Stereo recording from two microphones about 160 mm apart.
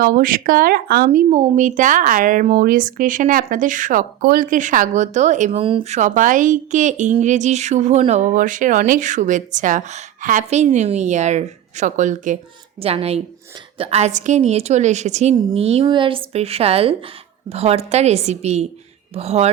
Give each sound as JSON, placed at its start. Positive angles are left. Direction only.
{"t": 0.0, "sound": "speech", "side_deg": -60}
{"t": 12.8, "sound": "a woman's voice", "side_deg": -40}